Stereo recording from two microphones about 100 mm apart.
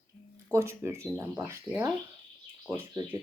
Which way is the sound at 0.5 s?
30° right (ahead or behind).